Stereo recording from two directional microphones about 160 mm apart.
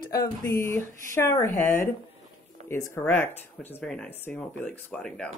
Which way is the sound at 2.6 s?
45° right (ahead or behind).